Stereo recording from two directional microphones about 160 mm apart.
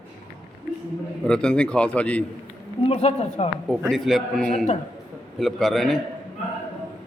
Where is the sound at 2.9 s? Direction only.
40° left (ahead or behind).